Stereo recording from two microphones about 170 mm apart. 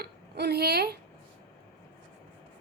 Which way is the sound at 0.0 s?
70° right (ahead or behind).